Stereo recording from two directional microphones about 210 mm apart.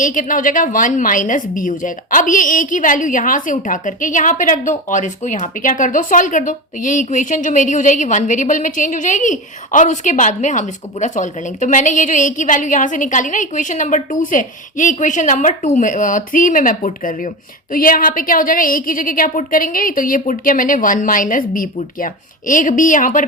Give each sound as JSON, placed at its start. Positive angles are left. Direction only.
{"t": 0.0, "sound": "a woman's voice", "side_deg": 40}